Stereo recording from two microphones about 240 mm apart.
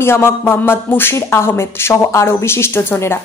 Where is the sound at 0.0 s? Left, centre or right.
Centre.